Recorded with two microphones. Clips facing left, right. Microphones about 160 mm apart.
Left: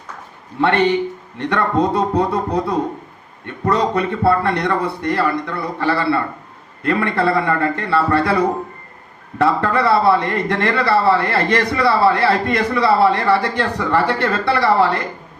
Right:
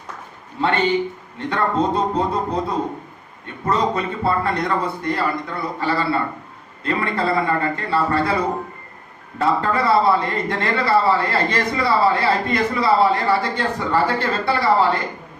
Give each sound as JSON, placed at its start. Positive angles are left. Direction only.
{"t": 1.4, "sound": "a man's voice", "side_deg": 65}
{"t": 9.4, "sound": "a man's voice", "side_deg": 65}